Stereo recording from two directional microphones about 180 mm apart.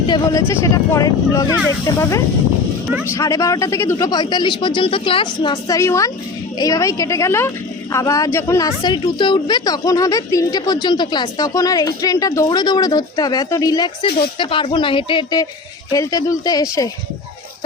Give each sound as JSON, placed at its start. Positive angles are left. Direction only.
{"t": 0.1, "sound": "a woman's voice", "side_deg": 20}